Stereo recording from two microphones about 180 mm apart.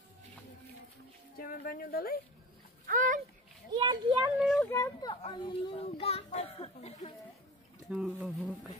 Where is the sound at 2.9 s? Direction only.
45° right (ahead or behind).